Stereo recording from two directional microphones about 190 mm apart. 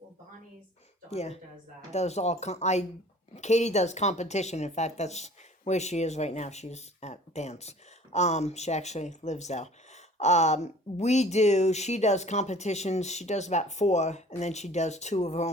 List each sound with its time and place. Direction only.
1.1 s speech: 35° left (ahead or behind)